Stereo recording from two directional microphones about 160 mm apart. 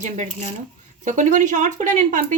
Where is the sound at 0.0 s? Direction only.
50° right (ahead or behind).